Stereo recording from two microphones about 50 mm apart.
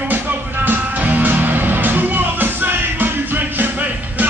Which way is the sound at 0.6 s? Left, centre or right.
Right.